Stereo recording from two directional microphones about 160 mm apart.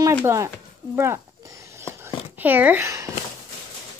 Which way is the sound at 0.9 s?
15° right (ahead or behind).